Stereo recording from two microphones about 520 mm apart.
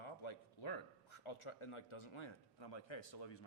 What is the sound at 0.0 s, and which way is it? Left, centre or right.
A man's voice, left.